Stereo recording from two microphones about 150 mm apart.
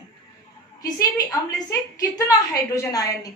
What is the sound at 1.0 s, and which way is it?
A woman's voice, 25° left (ahead or behind).